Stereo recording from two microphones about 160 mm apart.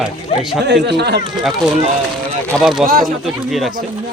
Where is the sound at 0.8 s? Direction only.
90° right.